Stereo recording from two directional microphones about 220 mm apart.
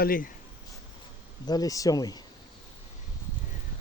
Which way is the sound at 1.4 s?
15° left (ahead or behind).